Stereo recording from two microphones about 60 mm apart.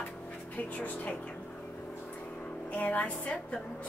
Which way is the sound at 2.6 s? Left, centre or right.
Left.